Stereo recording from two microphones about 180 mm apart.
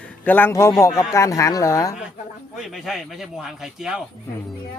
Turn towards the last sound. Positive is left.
turn(degrees=0)  # may be behind; listen again after turning